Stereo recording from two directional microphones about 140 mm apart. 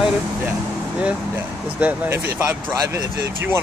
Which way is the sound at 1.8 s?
15° right (ahead or behind).